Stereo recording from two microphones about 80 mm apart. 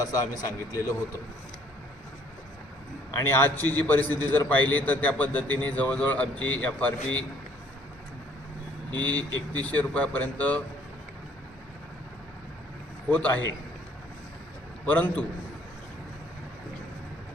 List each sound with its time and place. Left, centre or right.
0.0 s a man's voice: left
3.3 s a man's voice: left
9.0 s a man's voice: centre
13.1 s a man's voice: centre
14.8 s a man's voice: centre